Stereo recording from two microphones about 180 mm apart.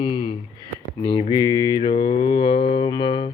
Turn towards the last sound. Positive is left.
turn(degrees=25)  # may be behind; listen again after turning